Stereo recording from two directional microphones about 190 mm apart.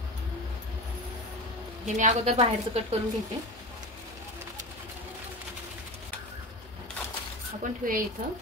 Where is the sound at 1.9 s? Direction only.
40° right (ahead or behind).